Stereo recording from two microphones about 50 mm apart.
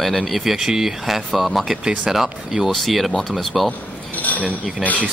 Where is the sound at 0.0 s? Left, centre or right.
Centre.